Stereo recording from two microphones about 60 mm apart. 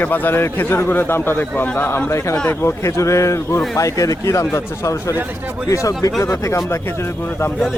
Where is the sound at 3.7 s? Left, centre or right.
Left.